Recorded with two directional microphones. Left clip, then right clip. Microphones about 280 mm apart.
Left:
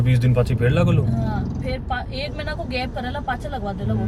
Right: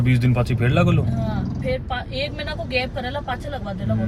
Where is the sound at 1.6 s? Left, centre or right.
Centre.